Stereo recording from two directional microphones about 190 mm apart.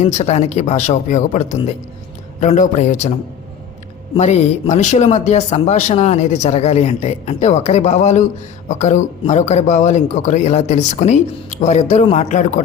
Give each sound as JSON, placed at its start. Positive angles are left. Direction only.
{"t": 0.0, "sound": "speech", "side_deg": 35}
{"t": 4.1, "sound": "speech", "side_deg": 35}